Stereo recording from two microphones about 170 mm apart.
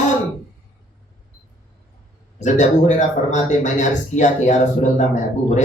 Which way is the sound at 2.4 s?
45° left (ahead or behind).